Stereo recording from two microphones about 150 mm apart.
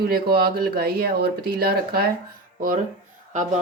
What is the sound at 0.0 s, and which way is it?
Speech, 90° right.